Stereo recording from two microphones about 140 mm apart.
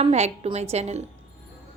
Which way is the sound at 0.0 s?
50° right (ahead or behind).